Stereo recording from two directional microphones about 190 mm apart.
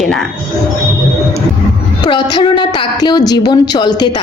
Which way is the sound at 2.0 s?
25° left (ahead or behind).